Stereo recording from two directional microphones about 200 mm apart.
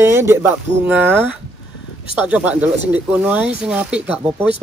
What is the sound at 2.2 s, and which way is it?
Speech, 5° right (ahead or behind).